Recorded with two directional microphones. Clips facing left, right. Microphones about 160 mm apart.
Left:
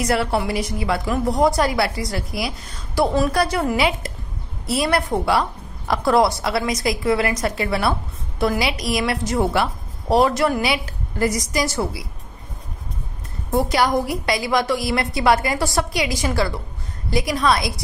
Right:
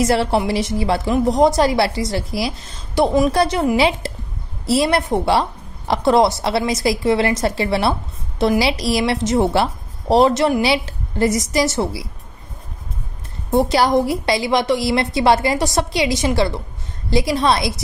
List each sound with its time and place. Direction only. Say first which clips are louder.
0.0 s a woman's voice: right 4 dB; 25° right (ahead or behind)
13.5 s a woman's voice: right 3 dB; 25° right (ahead or behind)